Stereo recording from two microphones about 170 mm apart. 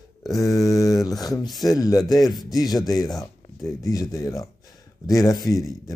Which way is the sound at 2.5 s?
20° left (ahead or behind).